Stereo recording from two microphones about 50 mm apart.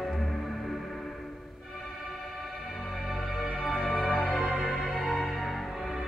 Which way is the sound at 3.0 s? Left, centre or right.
Centre.